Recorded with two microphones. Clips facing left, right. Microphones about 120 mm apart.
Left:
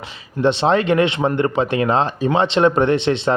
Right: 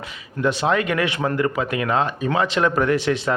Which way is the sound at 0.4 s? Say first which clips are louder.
Left 4 dB; 30° left (ahead or behind).